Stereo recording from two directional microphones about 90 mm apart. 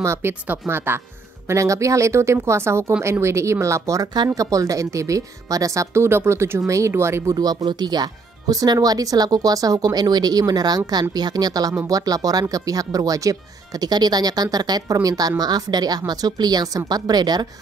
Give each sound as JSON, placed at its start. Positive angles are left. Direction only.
{"t": 0.0, "sound": "speech", "side_deg": -30}
{"t": 7.3, "sound": "a woman's voice", "side_deg": -50}